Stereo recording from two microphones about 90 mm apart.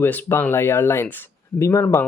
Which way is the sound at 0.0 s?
25° left (ahead or behind).